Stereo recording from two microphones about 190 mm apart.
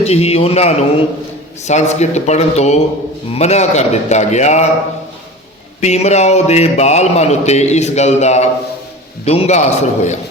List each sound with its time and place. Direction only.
0.0 s speech: 35° left (ahead or behind)
5.8 s speech: 35° left (ahead or behind)